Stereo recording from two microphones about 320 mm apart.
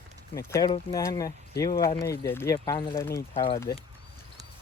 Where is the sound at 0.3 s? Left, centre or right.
Centre.